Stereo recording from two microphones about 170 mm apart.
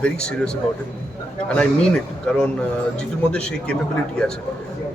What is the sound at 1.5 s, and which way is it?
A man's voice, 5° left (ahead or behind).